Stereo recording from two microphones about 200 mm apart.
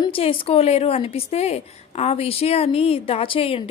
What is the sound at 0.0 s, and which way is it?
Speech, 30° left (ahead or behind).